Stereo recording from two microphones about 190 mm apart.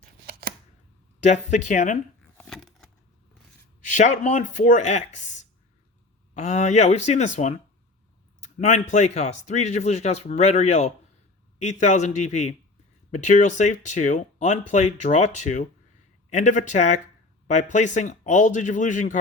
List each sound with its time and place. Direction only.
0.3 s shuffling cards: 50° right (ahead or behind)
1.2 s speech: 40° left (ahead or behind)
2.4 s a sound: centre (ahead or behind)
3.9 s speech: 40° left (ahead or behind)